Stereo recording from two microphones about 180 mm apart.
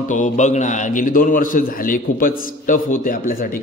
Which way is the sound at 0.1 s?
45° left (ahead or behind).